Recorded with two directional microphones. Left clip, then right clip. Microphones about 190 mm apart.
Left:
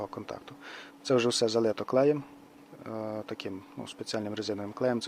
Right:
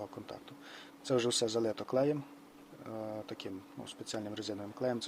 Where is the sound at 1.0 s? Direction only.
25° left (ahead or behind).